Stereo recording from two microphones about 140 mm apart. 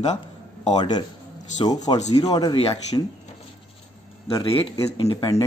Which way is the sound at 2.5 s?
40° left (ahead or behind).